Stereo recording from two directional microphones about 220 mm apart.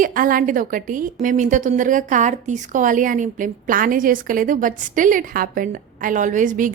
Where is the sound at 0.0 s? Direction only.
40° right (ahead or behind).